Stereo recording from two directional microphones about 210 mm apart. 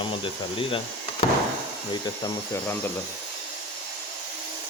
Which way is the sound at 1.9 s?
20° left (ahead or behind).